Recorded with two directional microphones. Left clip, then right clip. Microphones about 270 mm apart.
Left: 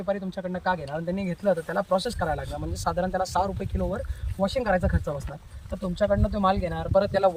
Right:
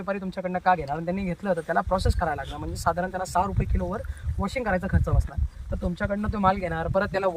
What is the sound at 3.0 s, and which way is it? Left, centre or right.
Speech, right.